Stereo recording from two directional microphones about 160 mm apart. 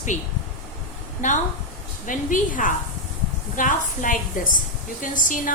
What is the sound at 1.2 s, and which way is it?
A woman's voice, 50° left (ahead or behind).